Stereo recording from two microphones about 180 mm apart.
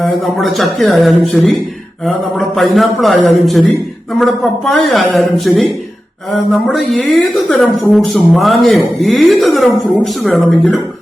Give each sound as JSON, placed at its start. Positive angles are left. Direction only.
{"t": 0.3, "sound": "a woman's voice", "side_deg": 0}
{"t": 2.6, "sound": "a woman's voice", "side_deg": 0}